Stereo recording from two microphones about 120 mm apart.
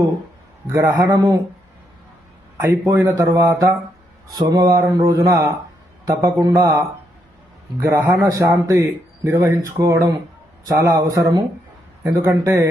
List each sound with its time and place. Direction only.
0.7 s a man's voice: 25° right (ahead or behind)
2.6 s a man's voice: 25° right (ahead or behind)